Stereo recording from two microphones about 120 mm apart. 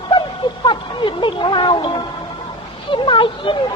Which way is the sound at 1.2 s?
40° left (ahead or behind).